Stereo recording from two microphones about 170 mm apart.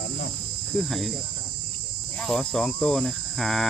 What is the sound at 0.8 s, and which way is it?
Cricket, centre (ahead or behind).